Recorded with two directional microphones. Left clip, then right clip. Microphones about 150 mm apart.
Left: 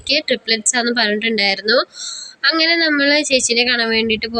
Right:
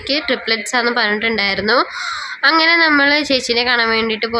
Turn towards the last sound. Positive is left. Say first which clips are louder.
# right 1 dB
turn(degrees=25)  # may be behind; listen again after turning